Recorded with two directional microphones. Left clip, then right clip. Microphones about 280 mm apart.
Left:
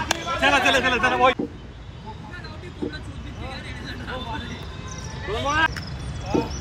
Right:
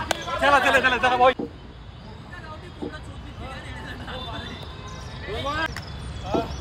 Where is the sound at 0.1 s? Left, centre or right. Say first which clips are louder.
Right 1 dB; centre.